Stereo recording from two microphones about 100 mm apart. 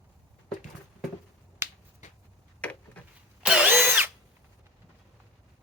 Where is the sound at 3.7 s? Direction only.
20° right (ahead or behind).